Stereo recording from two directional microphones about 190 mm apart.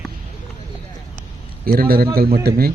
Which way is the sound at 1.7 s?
50° right (ahead or behind).